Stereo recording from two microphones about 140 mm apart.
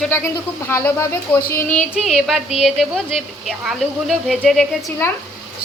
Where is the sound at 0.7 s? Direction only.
20° left (ahead or behind).